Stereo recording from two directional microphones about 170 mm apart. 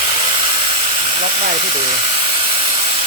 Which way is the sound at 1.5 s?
30° right (ahead or behind).